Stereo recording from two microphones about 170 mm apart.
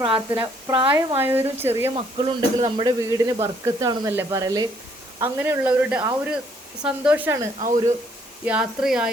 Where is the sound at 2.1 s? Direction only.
30° right (ahead or behind); by 7.4 s 10° right (ahead or behind).